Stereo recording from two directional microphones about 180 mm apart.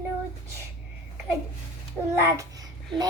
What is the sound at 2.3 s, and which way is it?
Babbling, 20° right (ahead or behind).